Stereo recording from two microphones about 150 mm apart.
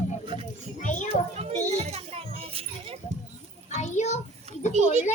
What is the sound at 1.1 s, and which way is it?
Children playing, 45° right (ahead or behind).